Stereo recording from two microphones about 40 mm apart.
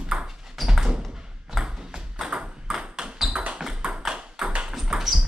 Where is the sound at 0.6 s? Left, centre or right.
Centre.